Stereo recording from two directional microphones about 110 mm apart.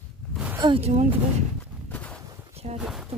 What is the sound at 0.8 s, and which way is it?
Speech, 70° right (ahead or behind).